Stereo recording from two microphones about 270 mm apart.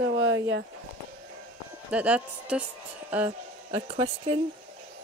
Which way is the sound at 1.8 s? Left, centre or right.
Centre.